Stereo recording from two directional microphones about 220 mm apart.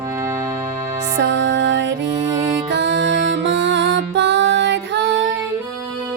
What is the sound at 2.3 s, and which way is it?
Speech, 25° right (ahead or behind).